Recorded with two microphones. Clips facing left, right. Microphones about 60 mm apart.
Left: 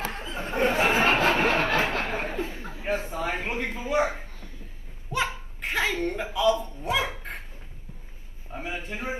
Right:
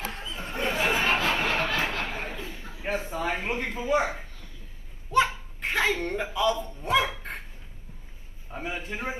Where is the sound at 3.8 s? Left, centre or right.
Right.